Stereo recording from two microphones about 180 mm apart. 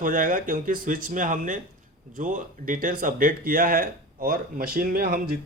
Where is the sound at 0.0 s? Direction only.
50° right (ahead or behind).